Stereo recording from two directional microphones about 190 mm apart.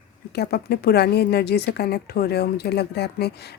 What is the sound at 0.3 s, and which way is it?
Speech, 55° left (ahead or behind).